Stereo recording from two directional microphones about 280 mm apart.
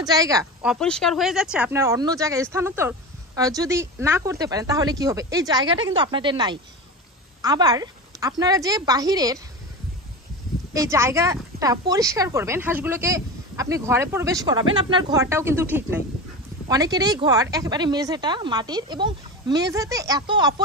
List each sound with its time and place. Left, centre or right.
0.0 s speech: centre
10.7 s speech: centre